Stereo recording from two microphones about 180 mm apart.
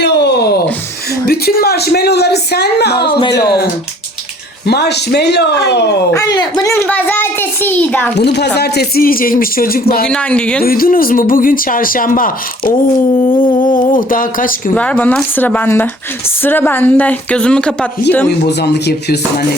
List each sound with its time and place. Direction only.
0.0 s a sound: 70° left (ahead or behind)
1.3 s speech: 60° left (ahead or behind)
3.1 s speech: 25° left (ahead or behind)
4.6 s speech: 65° left (ahead or behind)
6.1 s speech: 20° left (ahead or behind)
6.8 s speech: 10° left (ahead or behind)
8.2 s speech: 65° left (ahead or behind)
10.1 s speech: 5° left (ahead or behind)
10.6 s speech: 55° left (ahead or behind)
13.3 s speech: 30° left (ahead or behind)
13.7 s speech: 50° left (ahead or behind)
14.8 s speech: 5° left (ahead or behind)
18.6 s speech: 65° left (ahead or behind)